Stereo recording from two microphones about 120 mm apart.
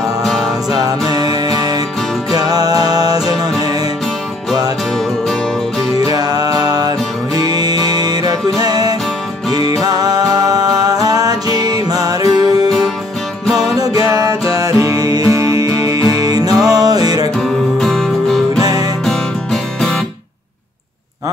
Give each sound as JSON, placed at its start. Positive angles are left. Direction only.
{"t": 0.2, "sound": "music", "side_deg": 5}
{"t": 0.5, "sound": "music", "side_deg": -30}
{"t": 5.9, "sound": "music", "side_deg": -30}
{"t": 13.7, "sound": "music", "side_deg": -30}
{"t": 17.7, "sound": "music", "side_deg": 5}
{"t": 18.6, "sound": "music", "side_deg": -30}
{"t": 19.0, "sound": "music", "side_deg": 5}